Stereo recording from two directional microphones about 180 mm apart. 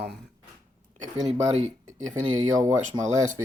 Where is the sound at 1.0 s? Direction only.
40° right (ahead or behind).